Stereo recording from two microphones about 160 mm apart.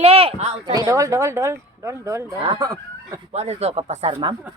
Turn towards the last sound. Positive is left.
turn(degrees=-35)  # may be behind; listen again after turning